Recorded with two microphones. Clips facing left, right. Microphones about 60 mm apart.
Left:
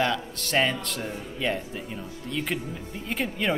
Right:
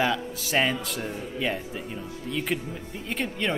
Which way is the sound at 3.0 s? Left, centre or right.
Centre.